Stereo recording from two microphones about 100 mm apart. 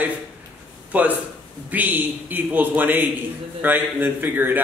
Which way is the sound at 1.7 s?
15° right (ahead or behind).